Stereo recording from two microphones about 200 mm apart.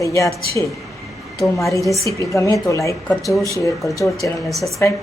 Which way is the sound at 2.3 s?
15° left (ahead or behind).